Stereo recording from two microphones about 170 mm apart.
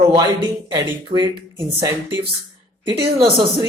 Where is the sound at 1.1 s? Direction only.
30° right (ahead or behind).